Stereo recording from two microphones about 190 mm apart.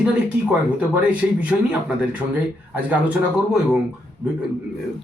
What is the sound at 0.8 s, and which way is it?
Speech, 5° right (ahead or behind).